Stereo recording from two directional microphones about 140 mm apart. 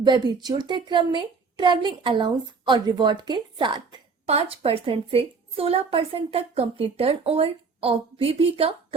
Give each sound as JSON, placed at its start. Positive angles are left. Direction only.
{"t": 0.0, "sound": "a woman's voice", "side_deg": -30}
{"t": 4.3, "sound": "a woman's voice", "side_deg": -45}